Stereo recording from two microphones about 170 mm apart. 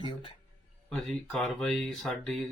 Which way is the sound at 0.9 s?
5° left (ahead or behind).